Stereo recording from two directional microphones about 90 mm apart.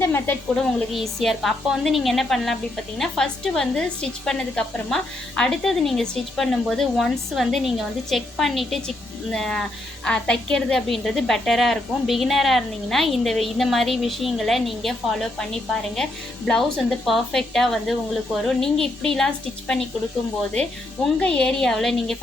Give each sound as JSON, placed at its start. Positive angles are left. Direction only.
{"t": 0.0, "sound": "a woman's voice", "side_deg": 25}
{"t": 0.9, "sound": "a woman's voice", "side_deg": 0}